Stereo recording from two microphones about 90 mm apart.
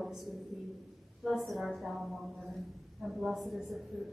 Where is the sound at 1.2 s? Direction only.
Centre (ahead or behind).